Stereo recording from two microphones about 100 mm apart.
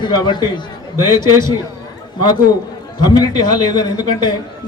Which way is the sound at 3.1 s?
45° left (ahead or behind).